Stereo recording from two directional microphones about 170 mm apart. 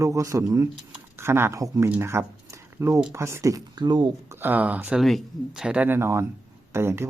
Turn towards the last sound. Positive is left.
turn(degrees=-15)  # may be behind; listen again after turning